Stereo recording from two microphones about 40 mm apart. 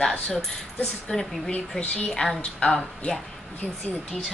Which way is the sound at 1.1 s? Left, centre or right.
Left.